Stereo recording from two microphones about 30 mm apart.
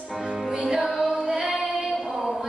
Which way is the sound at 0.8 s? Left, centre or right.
Centre.